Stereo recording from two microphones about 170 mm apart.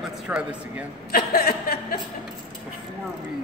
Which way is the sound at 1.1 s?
65° left (ahead or behind).